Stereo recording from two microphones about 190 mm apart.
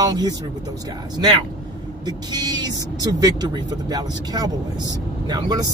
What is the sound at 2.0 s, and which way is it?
Speech, 20° right (ahead or behind).